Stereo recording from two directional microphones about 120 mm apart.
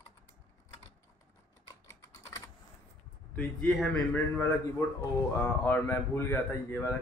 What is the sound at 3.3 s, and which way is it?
Speech, 10° left (ahead or behind).